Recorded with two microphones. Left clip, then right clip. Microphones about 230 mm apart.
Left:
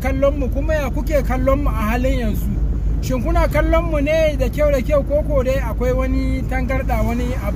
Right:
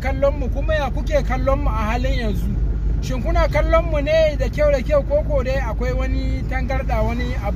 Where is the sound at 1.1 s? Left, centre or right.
Centre.